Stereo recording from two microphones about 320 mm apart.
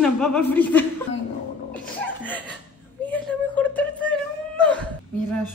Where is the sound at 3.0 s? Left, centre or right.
Centre.